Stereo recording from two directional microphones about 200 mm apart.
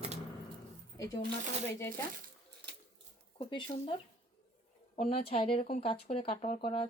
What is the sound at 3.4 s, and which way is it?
Speech, 25° left (ahead or behind).